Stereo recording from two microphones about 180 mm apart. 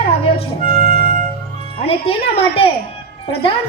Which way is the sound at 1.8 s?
35° left (ahead or behind).